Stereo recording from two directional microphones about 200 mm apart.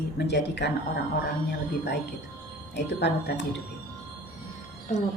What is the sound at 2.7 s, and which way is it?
Speech, 60° left (ahead or behind).